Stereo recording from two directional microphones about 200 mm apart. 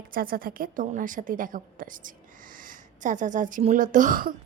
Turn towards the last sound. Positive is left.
turn(degrees=-45)  # may be behind; listen again after turning